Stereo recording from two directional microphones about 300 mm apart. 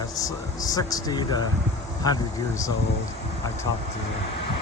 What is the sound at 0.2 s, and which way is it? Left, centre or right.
Speech, centre.